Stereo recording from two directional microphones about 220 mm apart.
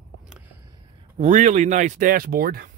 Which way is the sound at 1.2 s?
35° right (ahead or behind).